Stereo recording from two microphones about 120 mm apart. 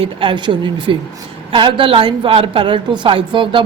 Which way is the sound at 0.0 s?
45° right (ahead or behind).